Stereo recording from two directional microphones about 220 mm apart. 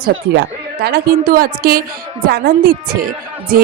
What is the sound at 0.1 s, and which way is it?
A woman's voice, 50° right (ahead or behind).